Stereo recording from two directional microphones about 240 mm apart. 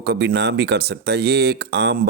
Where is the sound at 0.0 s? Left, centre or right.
Right.